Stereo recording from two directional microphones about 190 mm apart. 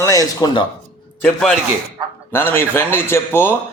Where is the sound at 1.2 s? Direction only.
5° left (ahead or behind).